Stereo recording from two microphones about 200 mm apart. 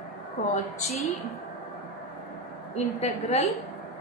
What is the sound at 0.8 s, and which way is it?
Speech, 30° left (ahead or behind).